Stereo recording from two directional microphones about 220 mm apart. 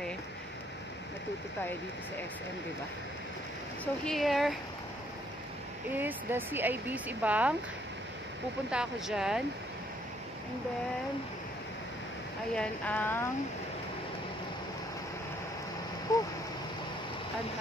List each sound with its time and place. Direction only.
3.8 s speech: 5° left (ahead or behind)
5.9 s speech: 10° right (ahead or behind)
8.6 s speech: 5° right (ahead or behind)
12.5 s speech: 5° left (ahead or behind)
16.1 s speech: 15° left (ahead or behind)